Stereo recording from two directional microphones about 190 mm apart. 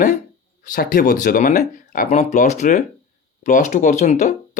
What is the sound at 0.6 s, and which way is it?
Speech, 45° left (ahead or behind).